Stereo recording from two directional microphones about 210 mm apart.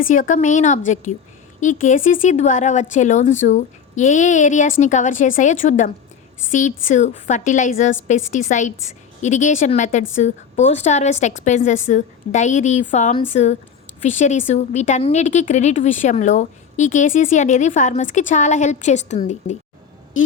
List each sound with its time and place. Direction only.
0.0 s a woman's voice: 40° left (ahead or behind)